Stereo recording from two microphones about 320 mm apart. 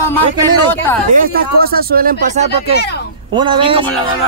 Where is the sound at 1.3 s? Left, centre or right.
Right.